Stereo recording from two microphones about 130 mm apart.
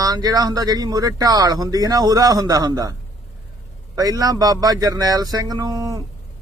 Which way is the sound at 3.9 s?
25° right (ahead or behind).